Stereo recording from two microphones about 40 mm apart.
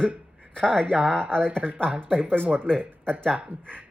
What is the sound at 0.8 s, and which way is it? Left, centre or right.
Speech, right.